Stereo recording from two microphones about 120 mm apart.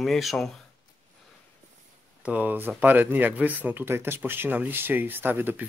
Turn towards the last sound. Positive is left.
turn(degrees=-15)  # may be behind; listen again after turning